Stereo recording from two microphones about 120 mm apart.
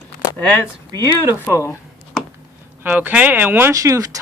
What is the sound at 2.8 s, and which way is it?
Speech, 15° right (ahead or behind).